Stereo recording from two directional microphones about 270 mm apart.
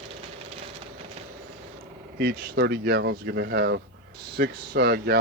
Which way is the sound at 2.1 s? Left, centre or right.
Right.